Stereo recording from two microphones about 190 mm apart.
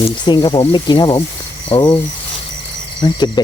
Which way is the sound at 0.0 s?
25° left (ahead or behind).